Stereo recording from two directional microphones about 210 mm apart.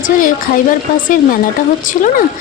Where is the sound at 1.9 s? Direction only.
40° left (ahead or behind).